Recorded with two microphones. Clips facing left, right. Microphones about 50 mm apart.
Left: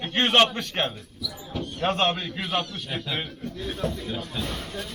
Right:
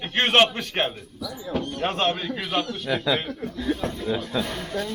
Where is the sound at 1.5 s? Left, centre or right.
Right.